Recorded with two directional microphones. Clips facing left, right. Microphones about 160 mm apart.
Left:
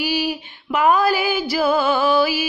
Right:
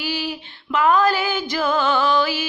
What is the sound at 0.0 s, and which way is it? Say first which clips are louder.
Female singing: left 4 dB; 15° left (ahead or behind).